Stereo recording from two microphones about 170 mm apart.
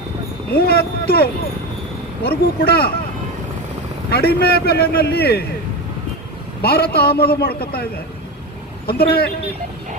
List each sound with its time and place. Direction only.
0.5 s a man's voice: 65° left (ahead or behind)
4.1 s a man's voice: 70° left (ahead or behind)
6.6 s a man's voice: 65° left (ahead or behind)
8.9 s a man's voice: 65° left (ahead or behind)